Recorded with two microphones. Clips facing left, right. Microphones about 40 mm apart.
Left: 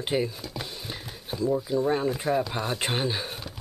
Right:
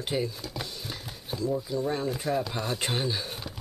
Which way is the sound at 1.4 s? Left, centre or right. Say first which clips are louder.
Left 4 dB; centre.